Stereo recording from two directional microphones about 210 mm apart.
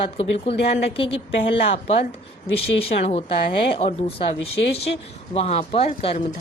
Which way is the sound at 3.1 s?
25° left (ahead or behind).